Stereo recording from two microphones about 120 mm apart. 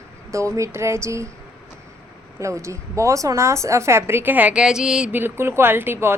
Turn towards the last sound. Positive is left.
turn(degrees=-20)  # may be behind; listen again after turning